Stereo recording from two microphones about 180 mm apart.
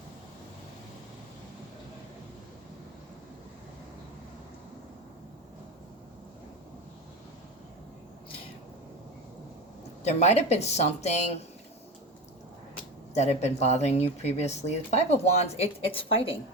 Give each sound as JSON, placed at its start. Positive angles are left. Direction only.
{"t": 10.0, "sound": "speech", "side_deg": 40}
{"t": 13.1, "sound": "a woman's voice", "side_deg": 40}